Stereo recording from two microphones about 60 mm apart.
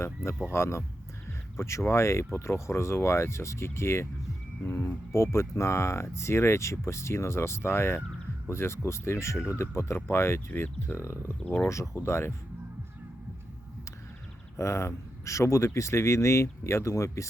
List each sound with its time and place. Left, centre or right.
0.5 s speech: left
10.5 s speech: left
10.9 s speech: left
11.4 s speech: left
11.7 s speech: left
14.5 s speech: left